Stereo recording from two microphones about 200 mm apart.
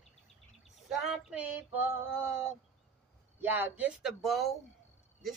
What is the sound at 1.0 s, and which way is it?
Female singing, 5° right (ahead or behind).